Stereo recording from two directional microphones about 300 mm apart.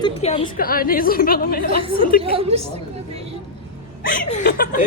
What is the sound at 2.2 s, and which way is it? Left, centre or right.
Speech, centre.